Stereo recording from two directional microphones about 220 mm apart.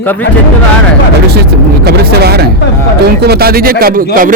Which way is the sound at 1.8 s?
45° right (ahead or behind).